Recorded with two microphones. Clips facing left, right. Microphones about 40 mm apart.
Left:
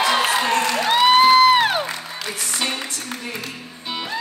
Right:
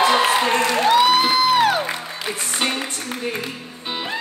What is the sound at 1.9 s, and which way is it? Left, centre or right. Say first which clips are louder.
Music: right 2 dB; centre.